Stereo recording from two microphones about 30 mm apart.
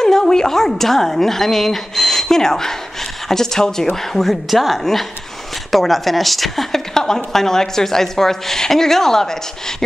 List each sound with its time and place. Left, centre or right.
0.0 s a woman's voice: centre
6.9 s a woman's voice: centre